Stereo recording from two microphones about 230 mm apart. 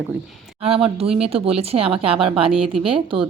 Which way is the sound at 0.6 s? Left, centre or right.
Right.